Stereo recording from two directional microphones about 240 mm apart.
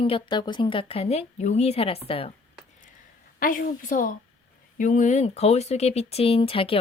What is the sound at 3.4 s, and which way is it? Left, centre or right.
Speech, left.